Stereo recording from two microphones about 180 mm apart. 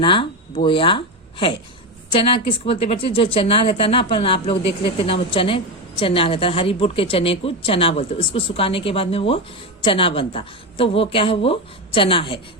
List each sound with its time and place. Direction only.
0.0 s a woman's voice: 30° left (ahead or behind)